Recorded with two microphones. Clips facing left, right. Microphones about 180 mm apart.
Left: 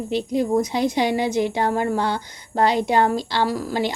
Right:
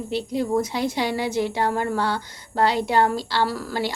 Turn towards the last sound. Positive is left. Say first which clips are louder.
# left 3 dB
turn(degrees=15)  # may be behind; listen again after turning